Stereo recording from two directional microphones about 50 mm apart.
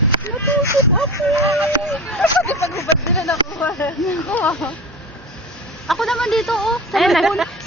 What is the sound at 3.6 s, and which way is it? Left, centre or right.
Speech, left.